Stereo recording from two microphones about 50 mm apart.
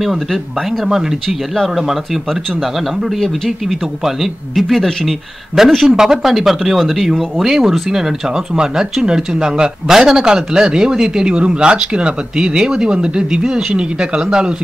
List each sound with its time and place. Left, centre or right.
0.0 s speech: centre
1.5 s speech: centre
5.8 s speech: centre